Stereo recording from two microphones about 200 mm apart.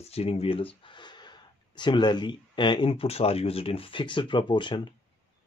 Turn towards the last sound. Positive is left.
turn(degrees=25)  # may be behind; listen again after turning